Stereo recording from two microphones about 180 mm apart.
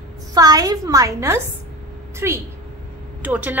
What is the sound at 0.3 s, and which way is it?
A woman's voice, 20° right (ahead or behind).